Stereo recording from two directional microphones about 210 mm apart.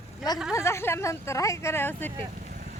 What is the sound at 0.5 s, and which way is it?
Speech, 15° left (ahead or behind).